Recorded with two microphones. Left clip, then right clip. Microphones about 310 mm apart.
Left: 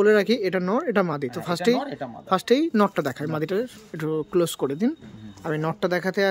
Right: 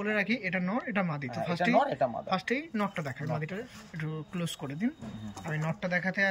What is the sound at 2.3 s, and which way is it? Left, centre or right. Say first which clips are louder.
Speech: left 11 dB; centre.